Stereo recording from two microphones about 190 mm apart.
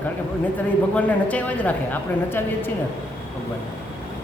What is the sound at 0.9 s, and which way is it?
A woman's voice, 10° left (ahead or behind).